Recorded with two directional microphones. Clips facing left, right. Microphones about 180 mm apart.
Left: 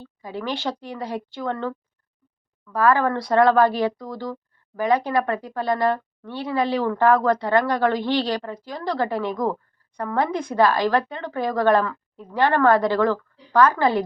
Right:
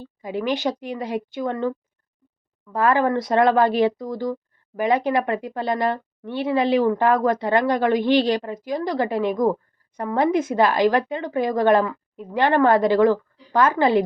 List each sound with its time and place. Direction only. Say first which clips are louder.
0.2 s speech: right 5 dB; 20° right (ahead or behind)